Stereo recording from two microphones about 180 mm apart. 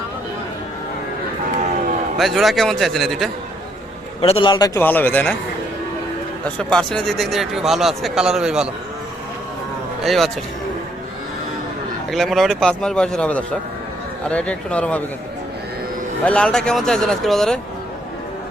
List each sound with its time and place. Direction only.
2.1 s speech: centre (ahead or behind)
4.2 s a man's voice: 30° left (ahead or behind)
4.8 s speech: 10° left (ahead or behind)
6.6 s speech: 5° left (ahead or behind)
10.0 s speech: centre (ahead or behind)
12.1 s speech: centre (ahead or behind)
16.2 s speech: 5° left (ahead or behind)